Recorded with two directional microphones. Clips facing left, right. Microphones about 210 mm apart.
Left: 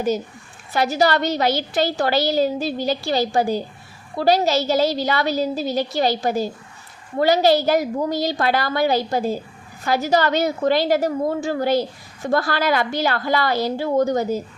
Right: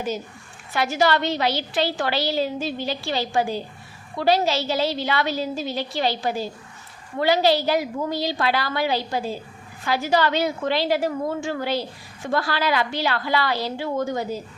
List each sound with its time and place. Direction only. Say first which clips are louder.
0.7 s a woman's voice: left 2 dB; 40° left (ahead or behind)